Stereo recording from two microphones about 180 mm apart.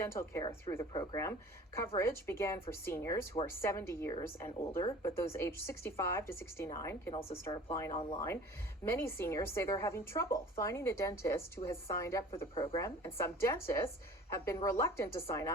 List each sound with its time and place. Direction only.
0.0 s a woman's voice: 15° left (ahead or behind)